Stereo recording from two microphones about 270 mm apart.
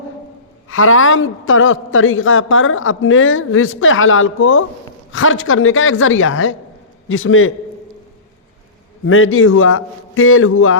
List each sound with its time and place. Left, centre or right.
0.7 s a man's voice: left
9.0 s a man's voice: left